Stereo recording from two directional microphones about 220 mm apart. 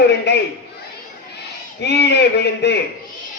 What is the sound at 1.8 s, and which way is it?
Speech, 50° left (ahead or behind).